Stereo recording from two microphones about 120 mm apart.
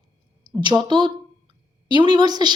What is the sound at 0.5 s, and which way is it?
Speech, 35° right (ahead or behind).